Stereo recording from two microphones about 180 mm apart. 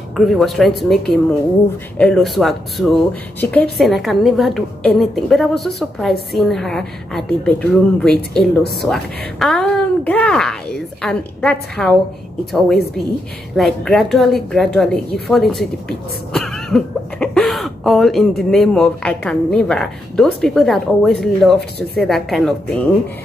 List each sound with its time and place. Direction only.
0.1 s speech: centre (ahead or behind)
13.6 s speech: centre (ahead or behind)
16.3 s cough: centre (ahead or behind)
18.4 s speech: 5° left (ahead or behind)
21.5 s speech: 65° left (ahead or behind)
22.0 s speech: centre (ahead or behind)